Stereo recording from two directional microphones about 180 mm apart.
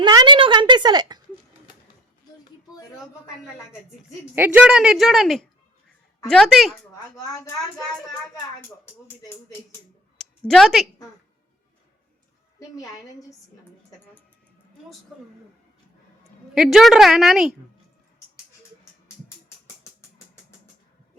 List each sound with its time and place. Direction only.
0.0 s a woman's voice: 25° right (ahead or behind)
4.4 s a woman's voice: 10° right (ahead or behind)
9.0 s speech: 15° left (ahead or behind)
10.2 s a sound: 5° left (ahead or behind)
12.5 s a woman's voice: 20° left (ahead or behind)
15.1 s a woman's voice: 5° right (ahead or behind)